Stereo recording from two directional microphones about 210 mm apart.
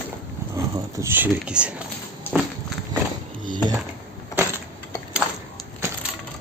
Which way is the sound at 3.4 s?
20° right (ahead or behind).